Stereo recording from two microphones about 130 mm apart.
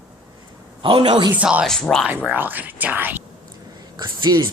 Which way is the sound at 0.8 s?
40° right (ahead or behind).